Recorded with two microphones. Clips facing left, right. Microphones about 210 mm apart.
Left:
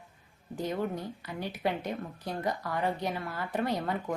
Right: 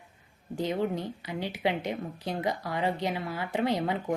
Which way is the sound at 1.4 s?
85° right.